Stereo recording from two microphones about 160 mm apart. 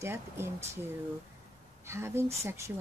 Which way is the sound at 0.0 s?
15° right (ahead or behind).